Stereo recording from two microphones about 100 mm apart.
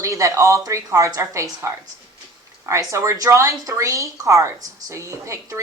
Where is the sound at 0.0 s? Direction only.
30° right (ahead or behind).